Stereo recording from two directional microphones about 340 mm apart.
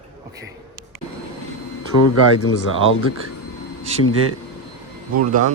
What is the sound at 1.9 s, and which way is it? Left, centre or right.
Speech, left.